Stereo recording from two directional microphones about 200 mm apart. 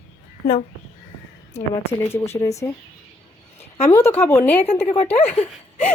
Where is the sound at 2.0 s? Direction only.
15° left (ahead or behind).